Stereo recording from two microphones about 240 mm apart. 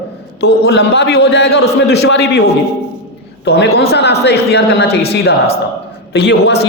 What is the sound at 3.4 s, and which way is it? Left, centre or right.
A man's voice, left.